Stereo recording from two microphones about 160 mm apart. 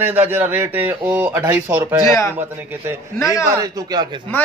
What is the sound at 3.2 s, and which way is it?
Speech, 20° left (ahead or behind).